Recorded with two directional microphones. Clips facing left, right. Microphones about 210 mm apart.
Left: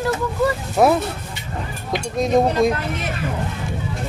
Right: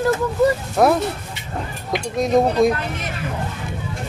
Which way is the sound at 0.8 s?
5° left (ahead or behind).